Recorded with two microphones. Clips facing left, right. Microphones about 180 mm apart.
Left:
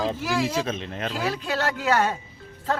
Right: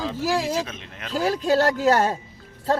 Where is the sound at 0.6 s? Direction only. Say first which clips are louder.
Left 7 dB; 30° left (ahead or behind).